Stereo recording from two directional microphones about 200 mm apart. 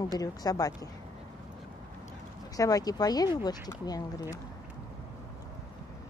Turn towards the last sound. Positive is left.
turn(degrees=20)  # may be behind; listen again after turning